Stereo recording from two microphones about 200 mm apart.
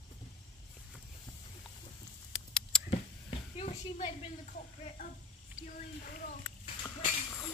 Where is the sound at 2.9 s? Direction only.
30° left (ahead or behind).